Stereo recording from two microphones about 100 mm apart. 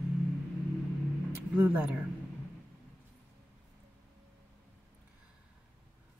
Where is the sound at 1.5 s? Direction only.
20° right (ahead or behind).